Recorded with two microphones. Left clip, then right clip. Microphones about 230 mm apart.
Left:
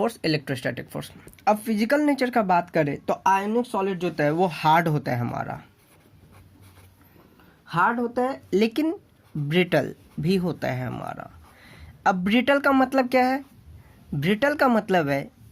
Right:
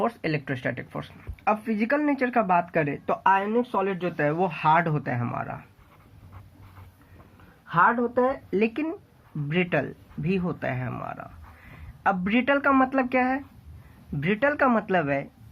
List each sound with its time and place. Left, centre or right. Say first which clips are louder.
0.0 s speech: left 2 dB; left
7.7 s speech: right 1 dB; left